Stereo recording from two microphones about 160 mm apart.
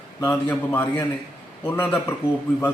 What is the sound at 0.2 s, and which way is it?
A man's voice, 15° left (ahead or behind).